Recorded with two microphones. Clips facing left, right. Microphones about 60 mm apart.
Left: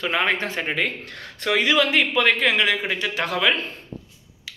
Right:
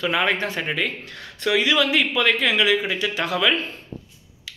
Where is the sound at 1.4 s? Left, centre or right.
Left.